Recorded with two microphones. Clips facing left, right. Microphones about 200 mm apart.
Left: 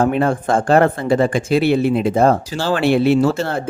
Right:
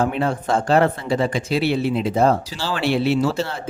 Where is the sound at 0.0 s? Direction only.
50° left (ahead or behind).